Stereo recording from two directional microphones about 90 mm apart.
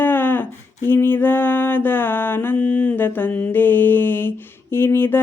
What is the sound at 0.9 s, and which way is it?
Mantra, 25° left (ahead or behind).